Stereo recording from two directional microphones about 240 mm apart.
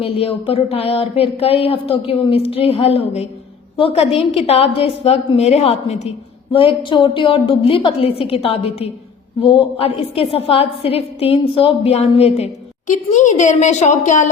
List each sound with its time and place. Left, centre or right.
0.0 s a woman's voice: left